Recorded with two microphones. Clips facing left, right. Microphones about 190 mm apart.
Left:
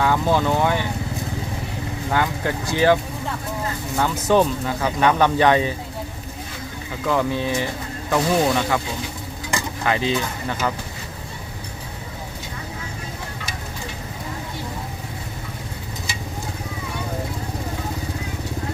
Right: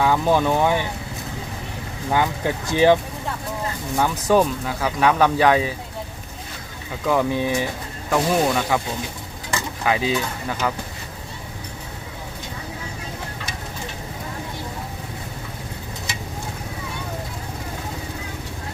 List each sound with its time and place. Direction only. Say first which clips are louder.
0.0 s speech: right 1 dB; 15° right (ahead or behind)
2.1 s speech: right 1 dB; 15° right (ahead or behind)
7.1 s speech: right 1 dB; 15° right (ahead or behind)
8.1 s speech: even; centre (ahead or behind)
9.8 s speech: even; 10° right (ahead or behind)